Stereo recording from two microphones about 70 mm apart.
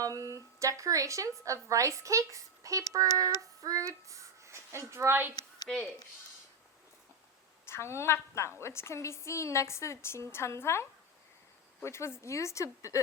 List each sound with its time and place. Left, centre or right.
0.0 s a sound: right
0.6 s a woman's voice: right
5.7 s speech: centre
7.7 s a woman's voice: left